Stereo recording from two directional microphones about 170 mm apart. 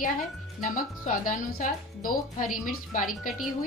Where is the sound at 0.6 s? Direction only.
55° left (ahead or behind).